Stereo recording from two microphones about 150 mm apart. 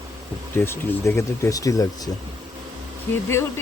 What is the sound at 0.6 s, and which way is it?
Speech, 20° left (ahead or behind).